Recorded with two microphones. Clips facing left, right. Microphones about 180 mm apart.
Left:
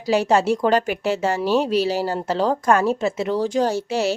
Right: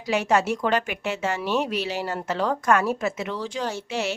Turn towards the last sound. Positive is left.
turn(degrees=35)  # may be behind; listen again after turning